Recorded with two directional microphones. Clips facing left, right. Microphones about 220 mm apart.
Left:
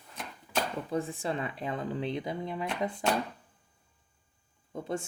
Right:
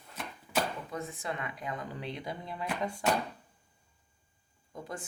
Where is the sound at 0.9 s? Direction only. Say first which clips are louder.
Left 6 dB; 30° left (ahead or behind).